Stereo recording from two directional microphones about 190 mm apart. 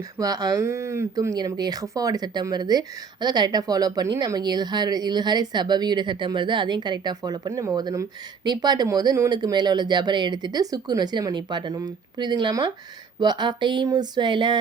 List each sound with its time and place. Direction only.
0.2 s speech: 20° right (ahead or behind)